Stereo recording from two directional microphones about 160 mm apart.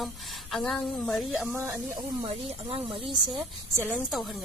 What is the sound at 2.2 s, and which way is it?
Speech, 35° right (ahead or behind).